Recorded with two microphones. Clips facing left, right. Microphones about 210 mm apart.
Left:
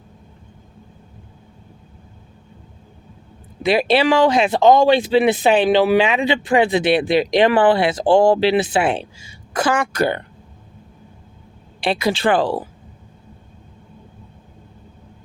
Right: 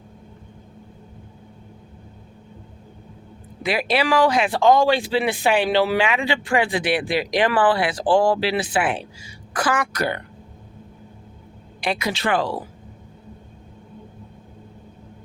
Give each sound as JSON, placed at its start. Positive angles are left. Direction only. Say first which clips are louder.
{"t": 3.6, "sound": "speech", "louder": "left 6 dB", "side_deg": 25}
{"t": 11.8, "sound": "speech", "louder": "left 5 dB", "side_deg": 30}